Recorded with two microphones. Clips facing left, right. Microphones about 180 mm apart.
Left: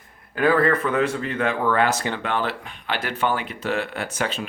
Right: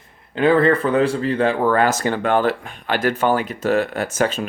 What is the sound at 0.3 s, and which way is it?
Speech, 25° right (ahead or behind).